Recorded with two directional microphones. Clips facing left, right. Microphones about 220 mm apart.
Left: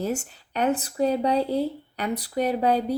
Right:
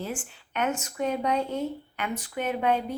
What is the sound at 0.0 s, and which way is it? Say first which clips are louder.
Speech: left 7 dB; 40° left (ahead or behind).